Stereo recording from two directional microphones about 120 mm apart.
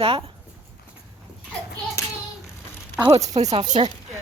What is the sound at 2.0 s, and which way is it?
Child singing, 25° left (ahead or behind).